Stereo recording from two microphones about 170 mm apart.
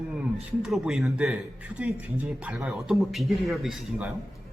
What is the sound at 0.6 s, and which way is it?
A man's voice, 5° right (ahead or behind).